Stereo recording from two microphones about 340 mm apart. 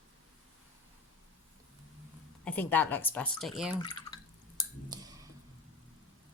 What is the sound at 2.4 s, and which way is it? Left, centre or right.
Speech, centre.